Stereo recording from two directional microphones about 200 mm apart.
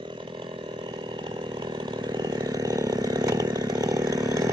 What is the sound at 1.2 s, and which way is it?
Chainsaw, 25° right (ahead or behind).